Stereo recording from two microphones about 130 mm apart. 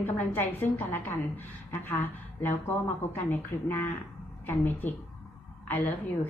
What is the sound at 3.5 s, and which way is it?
A woman's voice, 20° left (ahead or behind).